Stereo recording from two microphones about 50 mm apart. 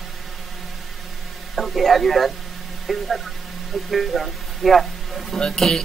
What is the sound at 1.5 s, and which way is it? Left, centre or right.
A man's voice, centre.